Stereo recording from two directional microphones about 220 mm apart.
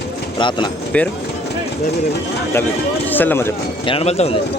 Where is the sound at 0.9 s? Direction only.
5° left (ahead or behind).